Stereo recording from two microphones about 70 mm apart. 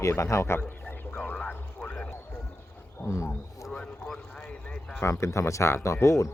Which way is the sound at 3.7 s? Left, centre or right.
Centre.